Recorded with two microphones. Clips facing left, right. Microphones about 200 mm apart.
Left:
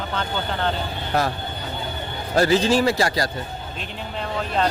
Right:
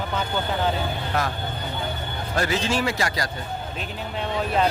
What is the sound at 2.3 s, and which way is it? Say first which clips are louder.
Speech: left 7 dB; 35° left (ahead or behind).